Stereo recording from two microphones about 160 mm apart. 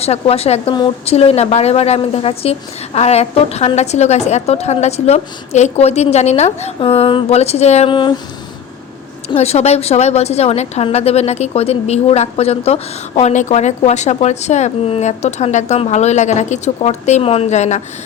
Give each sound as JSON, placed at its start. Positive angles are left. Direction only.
{"t": 0.0, "sound": "a woman's voice", "side_deg": 40}
{"t": 9.3, "sound": "a woman's voice", "side_deg": 40}